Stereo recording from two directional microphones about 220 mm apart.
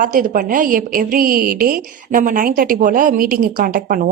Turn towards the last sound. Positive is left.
turn(degrees=-40)  # may be behind; listen again after turning